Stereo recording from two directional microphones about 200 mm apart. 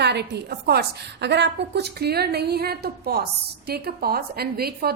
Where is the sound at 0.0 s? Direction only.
55° right (ahead or behind).